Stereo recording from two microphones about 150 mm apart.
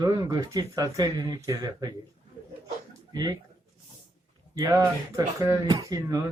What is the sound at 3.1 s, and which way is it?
Speech, 30° right (ahead or behind).